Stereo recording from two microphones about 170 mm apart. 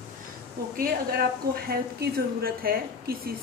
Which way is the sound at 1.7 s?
60° right (ahead or behind).